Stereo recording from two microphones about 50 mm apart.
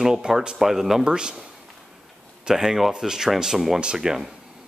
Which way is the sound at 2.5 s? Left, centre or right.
Centre.